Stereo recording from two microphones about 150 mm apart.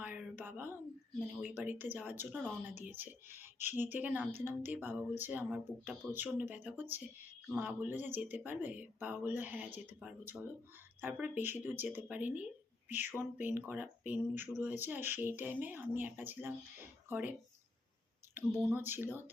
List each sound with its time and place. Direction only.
0.0 s a sound: 10° right (ahead or behind)
1.4 s speech: 10° right (ahead or behind)
18.7 s speech: 15° right (ahead or behind)